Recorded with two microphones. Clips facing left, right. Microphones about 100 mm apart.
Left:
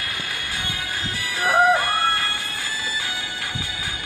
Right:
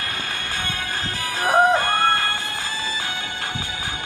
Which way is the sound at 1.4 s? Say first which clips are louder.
Right 1 dB; 25° right (ahead or behind).